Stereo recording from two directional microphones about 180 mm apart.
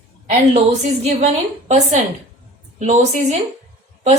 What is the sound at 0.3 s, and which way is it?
Speech, 40° right (ahead or behind).